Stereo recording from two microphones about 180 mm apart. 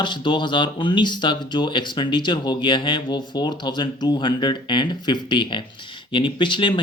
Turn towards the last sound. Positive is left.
turn(degrees=25)  # may be behind; listen again after turning